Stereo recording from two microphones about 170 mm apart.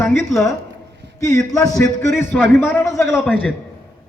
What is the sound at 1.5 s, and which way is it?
A man's voice, 20° left (ahead or behind).